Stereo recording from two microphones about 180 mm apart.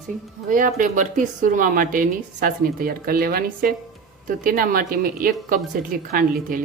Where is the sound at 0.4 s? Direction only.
45° right (ahead or behind).